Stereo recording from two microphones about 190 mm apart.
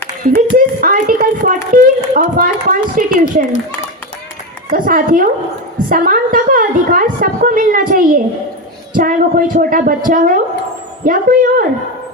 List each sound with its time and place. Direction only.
0.2 s speech: 45° right (ahead or behind)
4.7 s speech: 50° right (ahead or behind)